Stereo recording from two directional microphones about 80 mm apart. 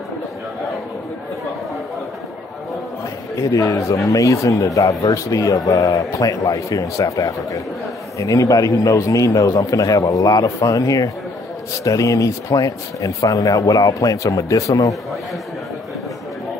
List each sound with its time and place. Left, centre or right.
3.3 s speech: left